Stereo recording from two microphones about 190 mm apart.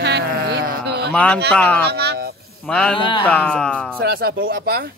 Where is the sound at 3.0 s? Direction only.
25° left (ahead or behind).